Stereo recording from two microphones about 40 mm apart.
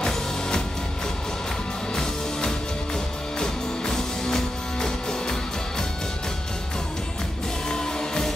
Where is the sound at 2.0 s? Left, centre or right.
Centre.